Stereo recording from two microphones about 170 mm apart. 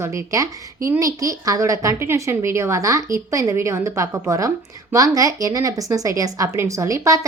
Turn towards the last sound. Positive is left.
turn(degrees=-20)  # may be behind; listen again after turning